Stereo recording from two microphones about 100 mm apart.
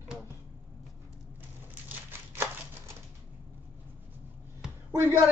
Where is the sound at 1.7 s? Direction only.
20° right (ahead or behind).